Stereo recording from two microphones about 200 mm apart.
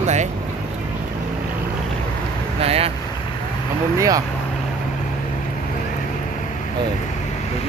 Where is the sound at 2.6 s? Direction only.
30° right (ahead or behind).